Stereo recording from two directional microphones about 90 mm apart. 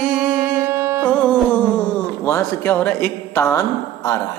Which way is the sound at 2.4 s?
25° left (ahead or behind).